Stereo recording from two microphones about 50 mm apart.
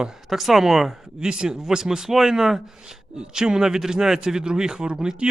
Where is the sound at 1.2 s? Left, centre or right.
Centre.